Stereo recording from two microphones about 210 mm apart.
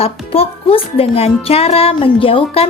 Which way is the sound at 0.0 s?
25° left (ahead or behind).